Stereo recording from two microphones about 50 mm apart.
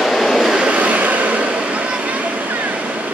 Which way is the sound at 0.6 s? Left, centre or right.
Right.